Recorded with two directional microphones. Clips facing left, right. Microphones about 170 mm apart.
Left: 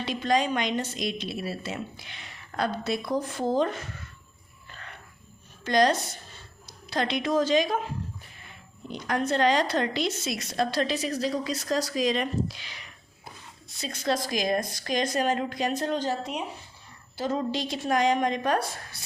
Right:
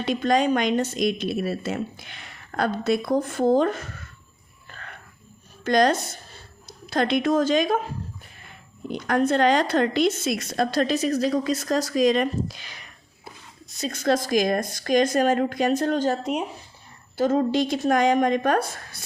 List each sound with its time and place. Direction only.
0.0 s a woman's voice: 50° right (ahead or behind)
5.6 s a woman's voice: 50° right (ahead or behind)
8.9 s a woman's voice: 50° right (ahead or behind)